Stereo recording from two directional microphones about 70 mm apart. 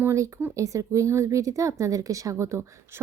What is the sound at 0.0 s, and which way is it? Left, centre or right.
Speech, right.